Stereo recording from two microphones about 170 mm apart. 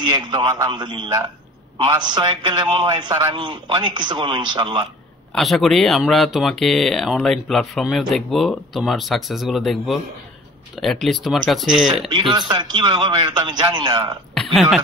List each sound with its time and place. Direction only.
0.0 s a man's voice: 25° right (ahead or behind)
5.3 s speech: centre (ahead or behind)
12.1 s a man's voice: 25° right (ahead or behind)
14.3 s a sound: centre (ahead or behind)